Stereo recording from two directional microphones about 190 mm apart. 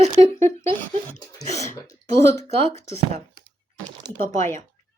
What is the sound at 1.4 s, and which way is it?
Speech, 15° left (ahead or behind).